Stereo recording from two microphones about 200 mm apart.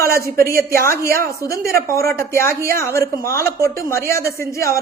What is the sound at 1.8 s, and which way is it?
Speech, 15° left (ahead or behind).